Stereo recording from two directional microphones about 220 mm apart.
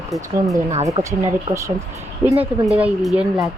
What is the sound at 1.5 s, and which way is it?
Speech, 15° right (ahead or behind).